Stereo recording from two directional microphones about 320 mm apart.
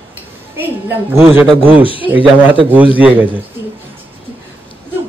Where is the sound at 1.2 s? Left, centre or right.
Centre.